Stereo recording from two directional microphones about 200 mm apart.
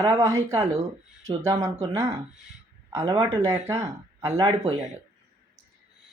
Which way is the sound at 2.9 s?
15° right (ahead or behind).